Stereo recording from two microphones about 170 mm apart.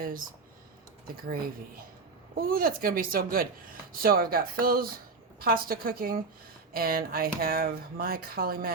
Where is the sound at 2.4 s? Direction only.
60° right (ahead or behind).